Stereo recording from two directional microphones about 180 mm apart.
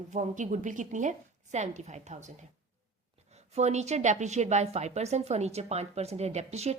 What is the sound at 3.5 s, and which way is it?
A woman's voice, 40° right (ahead or behind).